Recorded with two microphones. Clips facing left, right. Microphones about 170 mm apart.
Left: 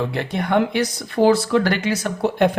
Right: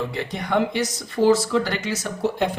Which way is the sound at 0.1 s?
60° left (ahead or behind).